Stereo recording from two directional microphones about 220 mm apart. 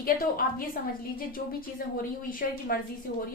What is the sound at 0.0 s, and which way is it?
Speech, 40° left (ahead or behind).